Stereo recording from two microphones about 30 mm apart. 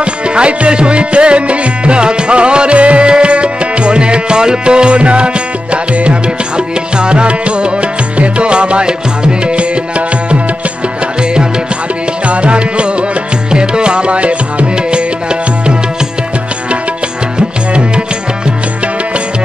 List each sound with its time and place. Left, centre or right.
0.0 s music: right
12.3 s music: right